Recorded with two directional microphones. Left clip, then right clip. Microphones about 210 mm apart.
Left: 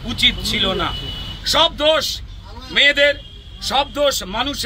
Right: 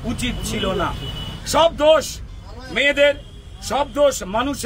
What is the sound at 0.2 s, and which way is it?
Speech, 25° right (ahead or behind).